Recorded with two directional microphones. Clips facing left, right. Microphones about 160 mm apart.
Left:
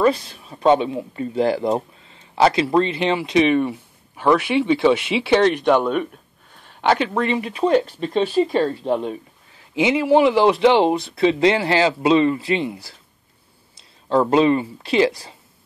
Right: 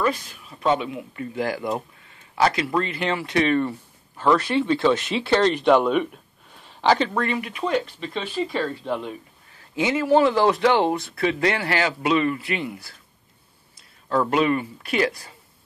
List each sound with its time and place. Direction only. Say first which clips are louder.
0.0 s speech: left 6 dB; 30° left (ahead or behind); by 5.5 s 10° left (ahead or behind)
5.6 s speech: even; centre (ahead or behind)
7.2 s speech: left 5 dB; 25° left (ahead or behind)
9.8 s speech: left 3 dB; 15° left (ahead or behind)
14.0 s speech: left 5 dB; 25° left (ahead or behind)